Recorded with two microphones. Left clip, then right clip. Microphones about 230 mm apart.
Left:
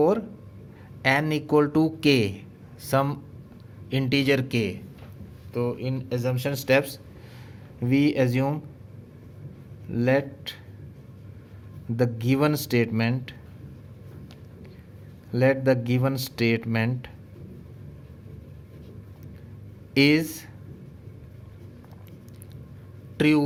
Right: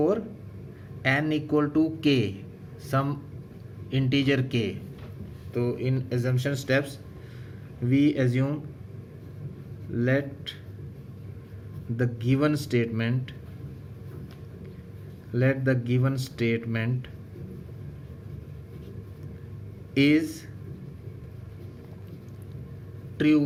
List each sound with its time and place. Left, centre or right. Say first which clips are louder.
1.0 s speech: left 2 dB; left
5.5 s speech: even; left
9.9 s speech: left 3 dB; left
11.9 s speech: left 3 dB; left
15.3 s speech: left 5 dB; left
19.9 s speech: left 2 dB; left
23.1 s speech: left 1 dB; left